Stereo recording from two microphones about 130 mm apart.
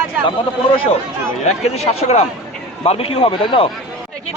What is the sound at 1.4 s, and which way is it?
A man's voice, 55° left (ahead or behind).